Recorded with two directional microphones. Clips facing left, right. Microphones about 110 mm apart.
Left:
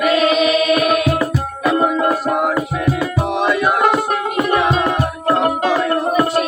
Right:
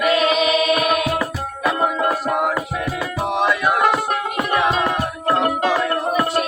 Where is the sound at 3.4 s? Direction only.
30° left (ahead or behind).